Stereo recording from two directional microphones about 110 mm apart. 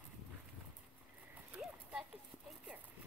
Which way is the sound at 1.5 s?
5° right (ahead or behind).